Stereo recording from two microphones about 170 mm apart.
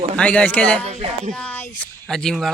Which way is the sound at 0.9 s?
40° right (ahead or behind).